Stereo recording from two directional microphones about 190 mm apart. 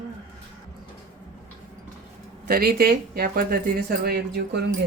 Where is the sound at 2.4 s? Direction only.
55° right (ahead or behind).